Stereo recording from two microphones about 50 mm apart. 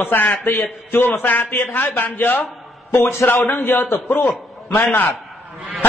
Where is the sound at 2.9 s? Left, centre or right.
Left.